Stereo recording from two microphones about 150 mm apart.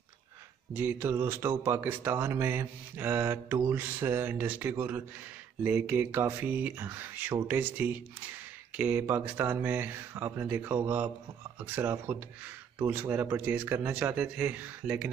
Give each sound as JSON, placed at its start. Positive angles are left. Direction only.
{"t": 0.7, "sound": "speech", "side_deg": -15}